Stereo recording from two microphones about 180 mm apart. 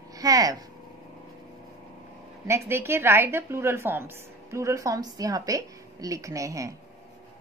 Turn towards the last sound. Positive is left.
turn(degrees=-20)  # may be behind; listen again after turning